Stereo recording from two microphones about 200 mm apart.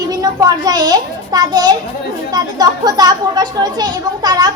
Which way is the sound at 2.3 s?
20° right (ahead or behind).